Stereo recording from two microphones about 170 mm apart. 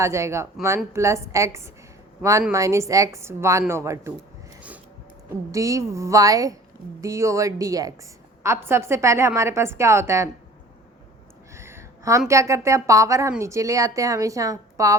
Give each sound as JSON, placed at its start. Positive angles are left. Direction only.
{"t": 0.0, "sound": "a woman's voice", "side_deg": -15}
{"t": 5.5, "sound": "a woman's voice", "side_deg": -20}
{"t": 11.5, "sound": "a sound", "side_deg": -15}
{"t": 12.3, "sound": "a woman's voice", "side_deg": -15}